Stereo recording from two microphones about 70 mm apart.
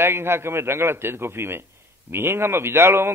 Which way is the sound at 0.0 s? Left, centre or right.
Right.